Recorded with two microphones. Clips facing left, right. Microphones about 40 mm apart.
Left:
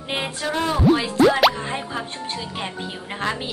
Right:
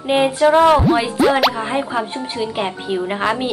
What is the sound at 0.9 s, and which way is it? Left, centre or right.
Speech, centre.